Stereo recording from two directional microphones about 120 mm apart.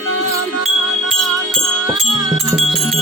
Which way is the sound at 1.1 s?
Centre (ahead or behind).